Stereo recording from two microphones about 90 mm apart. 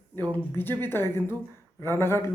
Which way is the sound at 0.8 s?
25° left (ahead or behind).